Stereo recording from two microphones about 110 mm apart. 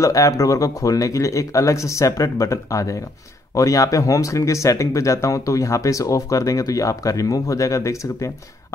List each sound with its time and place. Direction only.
0.0 s speech: 30° left (ahead or behind)